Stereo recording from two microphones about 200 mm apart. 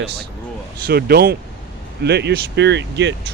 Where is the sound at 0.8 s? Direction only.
50° right (ahead or behind).